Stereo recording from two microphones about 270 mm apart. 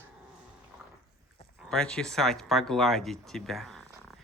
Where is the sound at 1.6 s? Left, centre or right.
Centre.